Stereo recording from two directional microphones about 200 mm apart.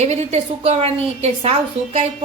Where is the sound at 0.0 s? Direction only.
35° right (ahead or behind).